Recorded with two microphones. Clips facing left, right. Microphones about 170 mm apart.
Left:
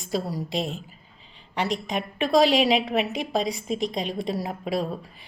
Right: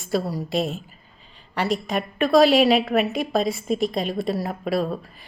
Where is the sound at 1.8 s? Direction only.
20° left (ahead or behind).